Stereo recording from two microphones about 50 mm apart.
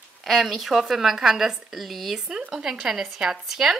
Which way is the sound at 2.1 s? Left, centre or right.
Centre.